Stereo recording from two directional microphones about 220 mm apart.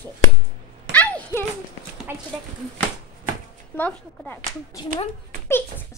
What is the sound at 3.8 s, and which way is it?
Speech, 5° left (ahead or behind).